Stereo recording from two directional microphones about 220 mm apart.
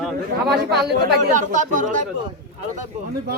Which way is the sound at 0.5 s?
45° right (ahead or behind).